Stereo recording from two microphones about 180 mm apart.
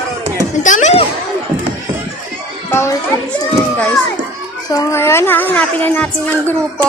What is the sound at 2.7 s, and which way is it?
Children playing, 15° left (ahead or behind).